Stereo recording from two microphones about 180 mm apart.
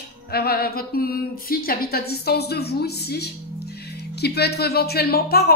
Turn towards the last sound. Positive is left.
turn(degrees=60)  # may be behind; listen again after turning